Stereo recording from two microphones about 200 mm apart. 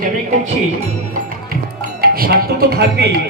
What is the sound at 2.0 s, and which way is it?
Speech, 50° right (ahead or behind).